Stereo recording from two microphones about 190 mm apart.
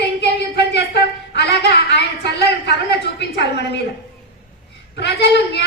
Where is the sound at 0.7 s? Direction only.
65° left (ahead or behind).